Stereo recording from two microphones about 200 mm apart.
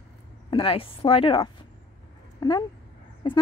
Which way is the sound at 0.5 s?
25° left (ahead or behind).